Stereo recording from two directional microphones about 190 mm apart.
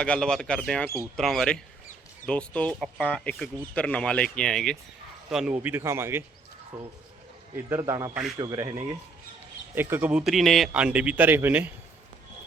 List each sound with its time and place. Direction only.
0.0 s a man's voice: 5° left (ahead or behind)